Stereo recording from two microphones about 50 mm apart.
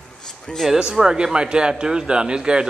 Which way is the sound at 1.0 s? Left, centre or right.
Centre.